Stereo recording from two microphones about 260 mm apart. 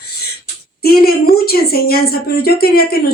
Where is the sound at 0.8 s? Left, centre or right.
Left.